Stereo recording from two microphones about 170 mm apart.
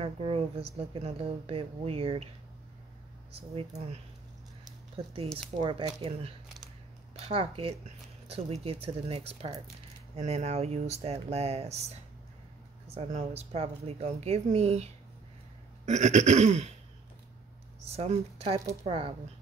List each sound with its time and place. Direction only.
0.0 s speech: 35° right (ahead or behind)
3.5 s speech: 35° right (ahead or behind)
7.2 s speech: 35° right (ahead or behind)
15.8 s a sound: 45° right (ahead or behind)
17.8 s speech: 35° right (ahead or behind)